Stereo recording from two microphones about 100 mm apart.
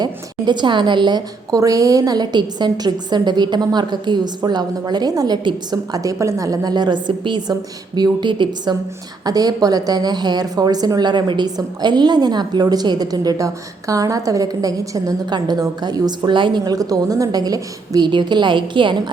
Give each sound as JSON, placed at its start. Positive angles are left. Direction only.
{"t": 0.0, "sound": "a woman's voice", "side_deg": -45}
{"t": 9.2, "sound": "a woman's voice", "side_deg": -40}